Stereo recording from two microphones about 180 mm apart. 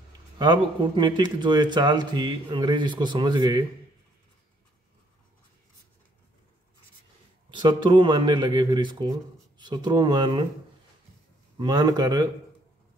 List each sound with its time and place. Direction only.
0.4 s speech: 25° right (ahead or behind)
7.5 s speech: 25° right (ahead or behind)
11.5 s speech: 20° right (ahead or behind)